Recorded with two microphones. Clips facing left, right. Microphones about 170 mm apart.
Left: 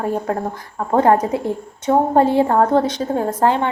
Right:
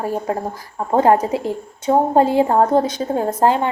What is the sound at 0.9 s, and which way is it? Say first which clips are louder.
A woman's voice: even; 15° right (ahead or behind).